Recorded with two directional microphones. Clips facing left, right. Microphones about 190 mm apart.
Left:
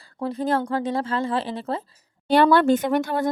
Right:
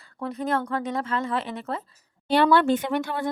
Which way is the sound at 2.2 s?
45° left (ahead or behind).